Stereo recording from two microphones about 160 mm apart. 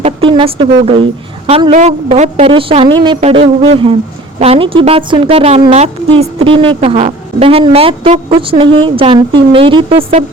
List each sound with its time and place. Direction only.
0.0 s a woman's voice: 30° right (ahead or behind)
3.2 s a woman's voice: 40° right (ahead or behind)